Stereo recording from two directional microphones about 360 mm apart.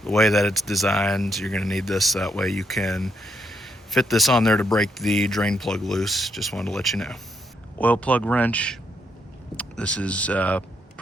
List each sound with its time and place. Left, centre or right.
0.0 s speech: centre